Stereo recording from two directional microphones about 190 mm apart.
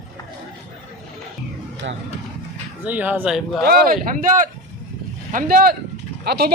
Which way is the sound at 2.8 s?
10° right (ahead or behind).